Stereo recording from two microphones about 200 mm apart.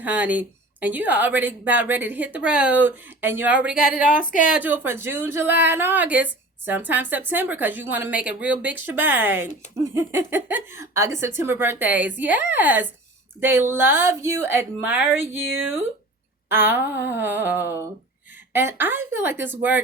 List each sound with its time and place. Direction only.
0.0 s a woman's voice: 10° right (ahead or behind)
4.2 s speech: 40° left (ahead or behind)
4.5 s a woman's voice: 10° right (ahead or behind)
16.5 s a woman's voice: 10° right (ahead or behind)